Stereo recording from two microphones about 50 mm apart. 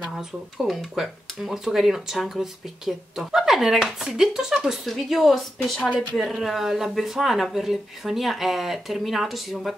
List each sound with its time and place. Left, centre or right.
0.1 s speech: centre